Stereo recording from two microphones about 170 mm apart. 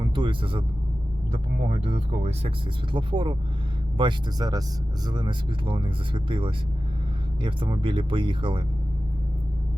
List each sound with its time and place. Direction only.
0.0 s music: 30° right (ahead or behind)
1.3 s speech: 45° right (ahead or behind)